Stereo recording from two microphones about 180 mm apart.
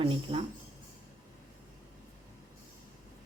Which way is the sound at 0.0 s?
30° right (ahead or behind).